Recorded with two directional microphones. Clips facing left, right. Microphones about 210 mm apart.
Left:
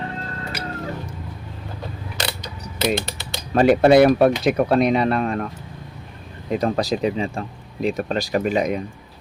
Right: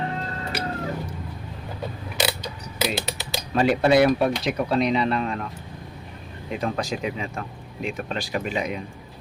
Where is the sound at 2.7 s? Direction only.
Centre (ahead or behind).